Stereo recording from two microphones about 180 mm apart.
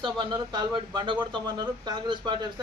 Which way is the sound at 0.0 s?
25° right (ahead or behind).